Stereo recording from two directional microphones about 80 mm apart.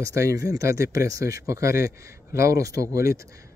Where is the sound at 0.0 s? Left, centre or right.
Right.